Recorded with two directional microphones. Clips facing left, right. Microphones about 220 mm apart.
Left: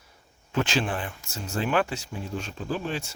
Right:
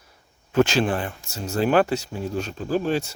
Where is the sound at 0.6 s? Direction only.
40° right (ahead or behind).